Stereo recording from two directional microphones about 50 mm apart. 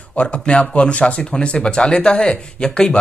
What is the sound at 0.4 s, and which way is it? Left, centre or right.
Speech, centre.